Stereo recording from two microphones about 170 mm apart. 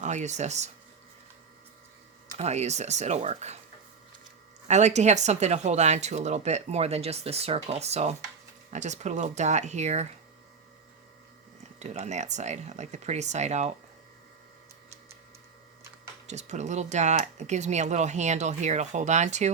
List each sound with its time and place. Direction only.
0.0 s speech: 45° right (ahead or behind)
2.4 s speech: 40° right (ahead or behind)
4.7 s speech: 40° right (ahead or behind)
11.8 s speech: 40° right (ahead or behind)
16.2 s speech: 40° right (ahead or behind)